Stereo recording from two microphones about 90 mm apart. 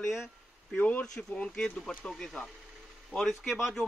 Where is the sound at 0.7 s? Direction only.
20° left (ahead or behind).